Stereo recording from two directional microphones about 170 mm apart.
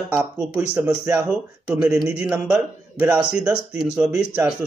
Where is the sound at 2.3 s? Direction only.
20° right (ahead or behind).